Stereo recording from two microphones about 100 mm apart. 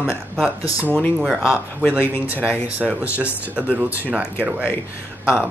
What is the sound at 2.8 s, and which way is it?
Speech, centre (ahead or behind).